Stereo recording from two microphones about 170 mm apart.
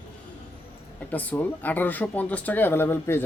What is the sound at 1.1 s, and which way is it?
Speech, 10° left (ahead or behind).